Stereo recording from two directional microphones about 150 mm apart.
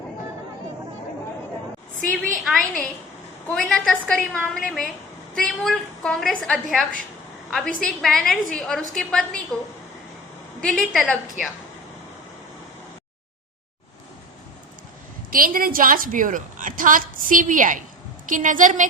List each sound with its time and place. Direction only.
2.4 s a woman's voice: centre (ahead or behind)
10.6 s a woman's voice: 5° left (ahead or behind)
15.3 s a woman's voice: 70° right (ahead or behind)